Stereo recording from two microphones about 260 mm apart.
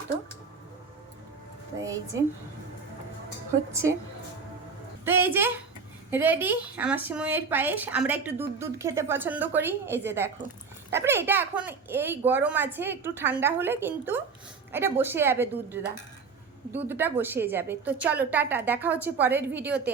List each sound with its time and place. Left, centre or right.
3.7 s a woman's voice: centre
5.0 s a woman's voice: centre